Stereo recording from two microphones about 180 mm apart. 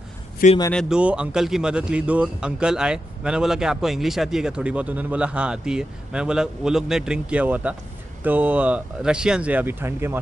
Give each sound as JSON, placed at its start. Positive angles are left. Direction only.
{"t": 0.4, "sound": "speech", "side_deg": 45}
{"t": 0.8, "sound": "speech", "side_deg": -5}